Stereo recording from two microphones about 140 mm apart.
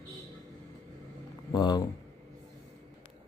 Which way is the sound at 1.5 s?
30° left (ahead or behind).